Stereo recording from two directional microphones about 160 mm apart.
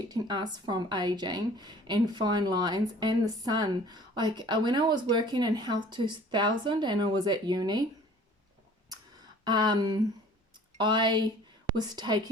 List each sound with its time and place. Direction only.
0.1 s a woman's voice: 25° right (ahead or behind)
9.4 s a woman's voice: 25° right (ahead or behind)